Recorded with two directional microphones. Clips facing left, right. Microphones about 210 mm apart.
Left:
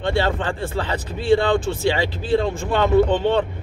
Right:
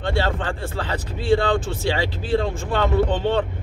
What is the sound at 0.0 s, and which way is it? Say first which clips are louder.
Speech: left 2 dB; 20° left (ahead or behind).